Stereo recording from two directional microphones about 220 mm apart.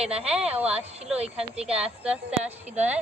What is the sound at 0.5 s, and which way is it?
Speech, 25° right (ahead or behind).